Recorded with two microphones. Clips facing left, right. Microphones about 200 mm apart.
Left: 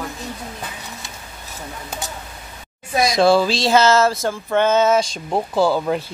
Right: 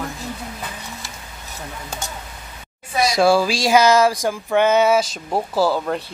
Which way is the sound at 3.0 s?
10° right (ahead or behind).